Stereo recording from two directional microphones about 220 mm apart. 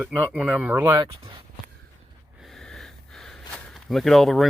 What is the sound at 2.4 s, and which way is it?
Speech, centre (ahead or behind).